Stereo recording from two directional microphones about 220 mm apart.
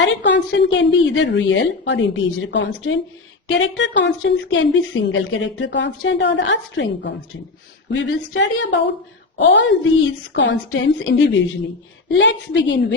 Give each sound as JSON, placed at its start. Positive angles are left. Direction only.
{"t": 0.0, "sound": "speech", "side_deg": 55}